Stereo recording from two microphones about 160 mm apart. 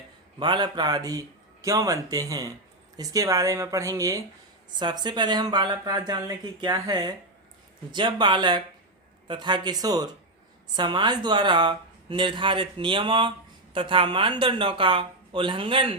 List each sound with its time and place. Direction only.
0.3 s speech: 30° right (ahead or behind)